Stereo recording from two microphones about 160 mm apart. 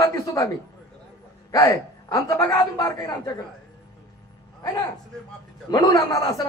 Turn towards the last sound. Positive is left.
turn(degrees=25)  # may be behind; listen again after turning